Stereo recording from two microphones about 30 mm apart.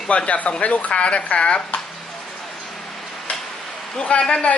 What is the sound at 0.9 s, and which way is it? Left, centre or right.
Speech, left.